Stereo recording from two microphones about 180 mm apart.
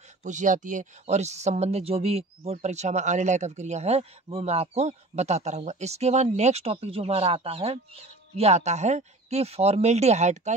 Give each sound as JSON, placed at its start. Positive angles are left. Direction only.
{"t": 0.2, "sound": "speech", "side_deg": -45}